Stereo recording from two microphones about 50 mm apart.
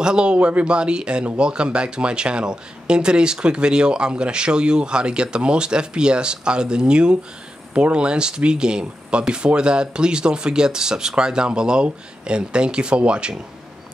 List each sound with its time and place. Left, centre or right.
0.0 s a man's voice: centre